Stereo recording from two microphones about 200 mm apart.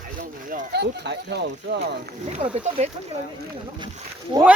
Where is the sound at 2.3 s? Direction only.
35° right (ahead or behind).